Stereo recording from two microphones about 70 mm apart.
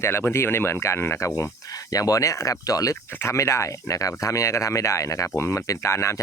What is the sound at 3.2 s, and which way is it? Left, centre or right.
Speech, left.